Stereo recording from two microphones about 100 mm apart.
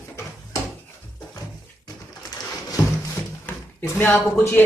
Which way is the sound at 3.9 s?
25° left (ahead or behind).